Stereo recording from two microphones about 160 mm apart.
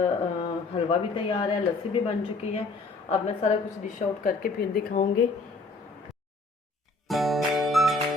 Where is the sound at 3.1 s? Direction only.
40° left (ahead or behind).